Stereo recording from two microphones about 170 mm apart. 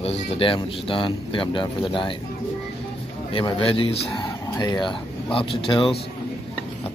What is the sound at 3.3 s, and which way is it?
Speech, 30° left (ahead or behind).